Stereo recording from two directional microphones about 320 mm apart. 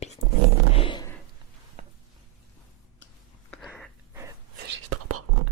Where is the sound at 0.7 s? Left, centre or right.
Centre.